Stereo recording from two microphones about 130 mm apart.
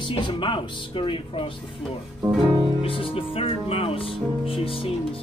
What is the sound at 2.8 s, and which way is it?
Music, 45° left (ahead or behind).